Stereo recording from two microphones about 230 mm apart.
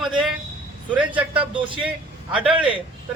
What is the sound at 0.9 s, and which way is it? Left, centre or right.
Speech, centre.